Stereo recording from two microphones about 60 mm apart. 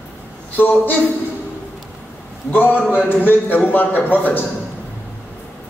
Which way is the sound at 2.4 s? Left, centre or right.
Left.